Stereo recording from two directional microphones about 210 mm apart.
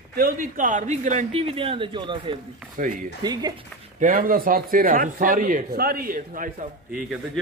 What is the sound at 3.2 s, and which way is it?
Speech, 20° right (ahead or behind).